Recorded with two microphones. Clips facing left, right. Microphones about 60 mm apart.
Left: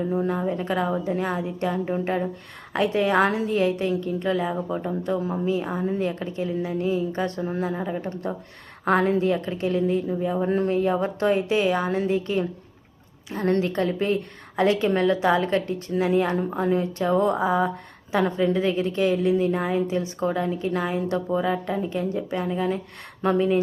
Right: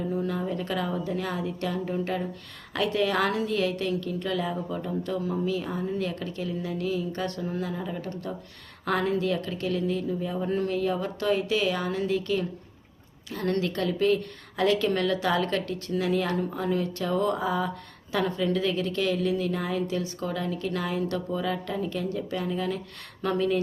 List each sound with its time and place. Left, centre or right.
0.0 s a woman's voice: left